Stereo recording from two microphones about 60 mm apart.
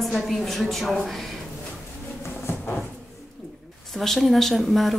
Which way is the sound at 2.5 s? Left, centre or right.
Left.